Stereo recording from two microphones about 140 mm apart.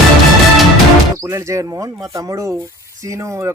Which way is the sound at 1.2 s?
20° right (ahead or behind).